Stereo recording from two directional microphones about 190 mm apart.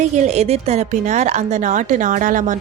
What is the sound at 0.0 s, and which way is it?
A woman's voice, 35° right (ahead or behind).